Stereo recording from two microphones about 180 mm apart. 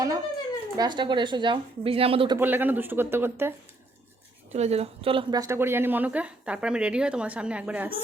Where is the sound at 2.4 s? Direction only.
10° right (ahead or behind).